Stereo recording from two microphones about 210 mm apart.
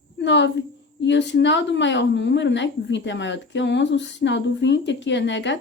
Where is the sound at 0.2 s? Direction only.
55° left (ahead or behind).